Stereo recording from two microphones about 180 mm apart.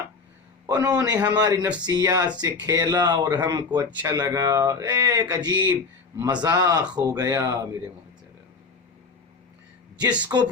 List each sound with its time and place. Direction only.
0.7 s speech: 20° right (ahead or behind)
10.3 s speech: 20° right (ahead or behind)